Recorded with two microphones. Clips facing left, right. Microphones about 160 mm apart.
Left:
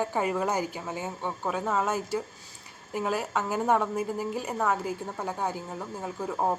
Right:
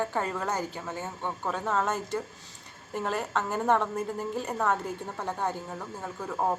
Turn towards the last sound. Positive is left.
turn(degrees=10)  # may be behind; listen again after turning